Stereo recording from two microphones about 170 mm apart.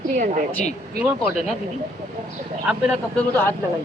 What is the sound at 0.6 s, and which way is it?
Speech, 40° left (ahead or behind).